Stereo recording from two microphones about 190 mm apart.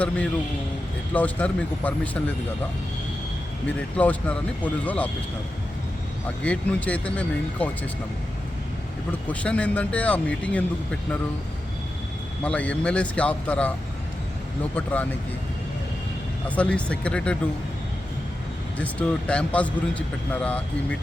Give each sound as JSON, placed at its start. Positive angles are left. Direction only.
{"t": 1.1, "sound": "a man's voice", "side_deg": 10}
{"t": 3.7, "sound": "a man's voice", "side_deg": 10}
{"t": 6.4, "sound": "a man's voice", "side_deg": 5}
{"t": 9.3, "sound": "a man's voice", "side_deg": 5}
{"t": 12.4, "sound": "a man's voice", "side_deg": 5}
{"t": 16.6, "sound": "speech", "side_deg": 5}
{"t": 18.8, "sound": "a man's voice", "side_deg": 5}